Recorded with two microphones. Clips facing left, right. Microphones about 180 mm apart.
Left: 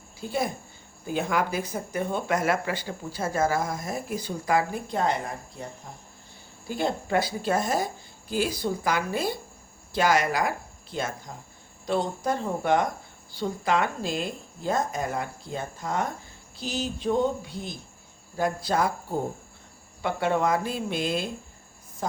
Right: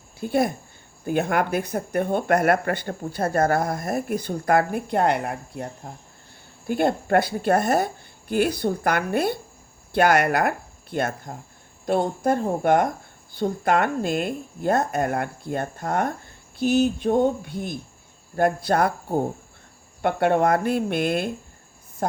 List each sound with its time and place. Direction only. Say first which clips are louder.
0.2 s speech: right 6 dB; 60° right (ahead or behind)
20.0 s speech: right 5 dB; 55° right (ahead or behind)